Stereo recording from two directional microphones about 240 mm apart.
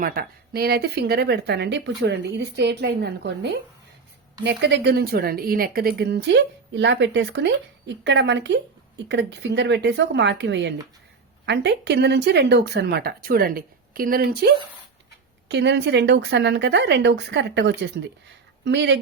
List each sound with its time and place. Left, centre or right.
0.0 s speech: right